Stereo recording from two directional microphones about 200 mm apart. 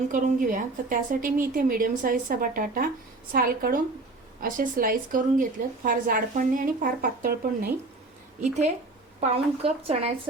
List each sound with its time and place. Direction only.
0.1 s speech: 40° right (ahead or behind)
9.3 s speech: 30° right (ahead or behind)